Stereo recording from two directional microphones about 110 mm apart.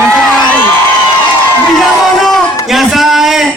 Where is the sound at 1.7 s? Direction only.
Centre (ahead or behind).